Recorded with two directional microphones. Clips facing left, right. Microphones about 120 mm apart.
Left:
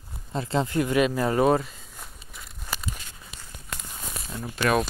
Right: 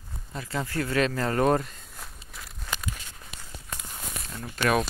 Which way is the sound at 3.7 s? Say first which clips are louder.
Left 1 dB; 85° left.